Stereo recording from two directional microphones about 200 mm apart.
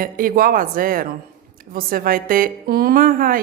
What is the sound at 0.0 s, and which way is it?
A woman's voice, 45° right (ahead or behind).